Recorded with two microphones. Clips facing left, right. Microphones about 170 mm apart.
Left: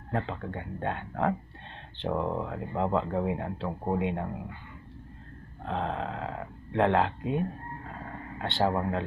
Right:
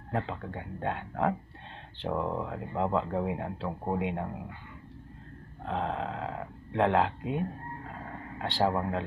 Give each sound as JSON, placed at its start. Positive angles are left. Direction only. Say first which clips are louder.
{"t": 0.1, "sound": "speech", "louder": "left 1 dB", "side_deg": -5}
{"t": 5.7, "sound": "speech", "louder": "even", "side_deg": 0}